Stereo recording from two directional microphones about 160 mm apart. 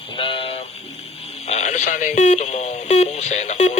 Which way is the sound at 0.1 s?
35° left (ahead or behind).